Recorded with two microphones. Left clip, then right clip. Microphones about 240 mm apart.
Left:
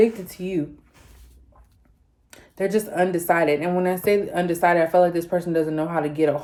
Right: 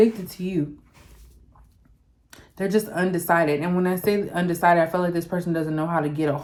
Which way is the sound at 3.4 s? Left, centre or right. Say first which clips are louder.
Left 2 dB; centre.